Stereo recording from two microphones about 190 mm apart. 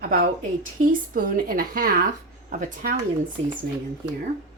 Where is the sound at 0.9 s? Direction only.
45° right (ahead or behind).